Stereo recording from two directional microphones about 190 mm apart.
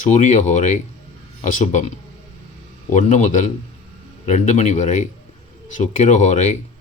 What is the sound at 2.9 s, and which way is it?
Speech, 40° left (ahead or behind).